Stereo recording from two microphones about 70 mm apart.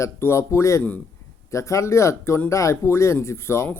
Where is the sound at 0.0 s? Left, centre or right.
Left.